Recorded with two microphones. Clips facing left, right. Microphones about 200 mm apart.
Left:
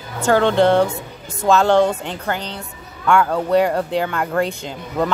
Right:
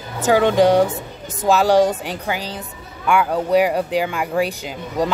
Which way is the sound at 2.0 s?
10° right (ahead or behind).